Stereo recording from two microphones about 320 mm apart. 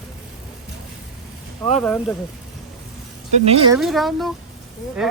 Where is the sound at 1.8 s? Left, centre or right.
Centre.